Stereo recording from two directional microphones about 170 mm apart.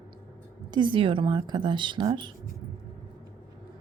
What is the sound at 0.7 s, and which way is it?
Speech, 30° right (ahead or behind).